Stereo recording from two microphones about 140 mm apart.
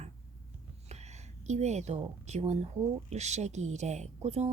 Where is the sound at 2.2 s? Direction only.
50° right (ahead or behind).